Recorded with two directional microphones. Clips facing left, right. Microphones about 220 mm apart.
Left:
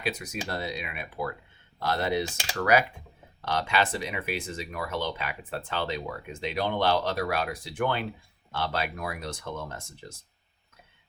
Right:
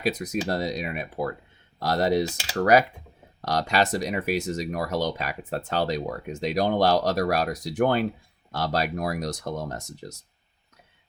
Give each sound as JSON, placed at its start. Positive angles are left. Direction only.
{"t": 0.0, "sound": "speech", "side_deg": -40}